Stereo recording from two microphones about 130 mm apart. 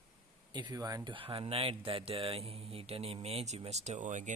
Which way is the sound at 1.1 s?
45° right (ahead or behind).